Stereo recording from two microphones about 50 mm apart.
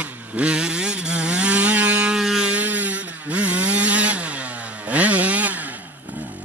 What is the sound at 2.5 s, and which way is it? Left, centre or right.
Wood, right.